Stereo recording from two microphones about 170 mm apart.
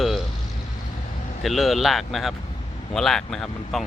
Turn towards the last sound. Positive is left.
turn(degrees=0)  # may be behind; listen again after turning